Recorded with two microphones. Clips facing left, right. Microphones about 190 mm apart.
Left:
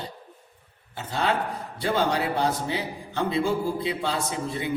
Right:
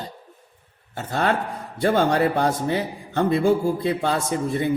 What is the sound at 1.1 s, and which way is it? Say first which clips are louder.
A man's voice: right 3 dB; 55° right (ahead or behind).